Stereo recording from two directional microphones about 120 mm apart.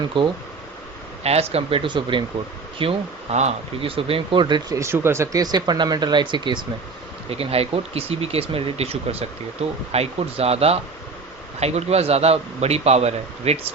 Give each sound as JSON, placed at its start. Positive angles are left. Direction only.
{"t": 0.1, "sound": "speech", "side_deg": -45}
{"t": 1.2, "sound": "speech", "side_deg": -60}
{"t": 4.8, "sound": "speech", "side_deg": -20}
{"t": 7.3, "sound": "a man's voice", "side_deg": -55}